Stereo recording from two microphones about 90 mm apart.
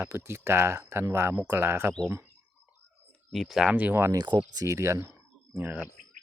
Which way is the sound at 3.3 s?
Centre (ahead or behind).